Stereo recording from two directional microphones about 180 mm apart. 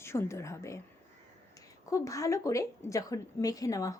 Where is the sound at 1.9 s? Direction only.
15° left (ahead or behind).